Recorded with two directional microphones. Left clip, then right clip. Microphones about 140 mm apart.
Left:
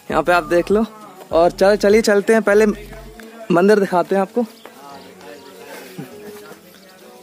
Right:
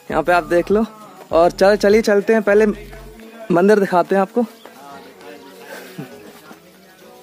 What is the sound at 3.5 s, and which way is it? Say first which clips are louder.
Speech: even; centre (ahead or behind).